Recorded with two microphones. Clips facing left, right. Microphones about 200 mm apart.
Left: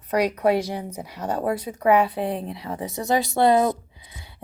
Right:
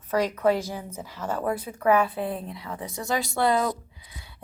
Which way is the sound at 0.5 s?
70° left (ahead or behind).